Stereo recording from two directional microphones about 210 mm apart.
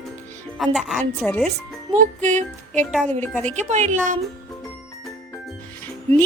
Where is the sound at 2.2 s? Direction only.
35° right (ahead or behind).